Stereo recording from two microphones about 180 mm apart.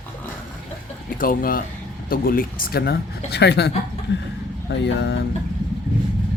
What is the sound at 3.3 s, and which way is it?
Speech, 70° left (ahead or behind).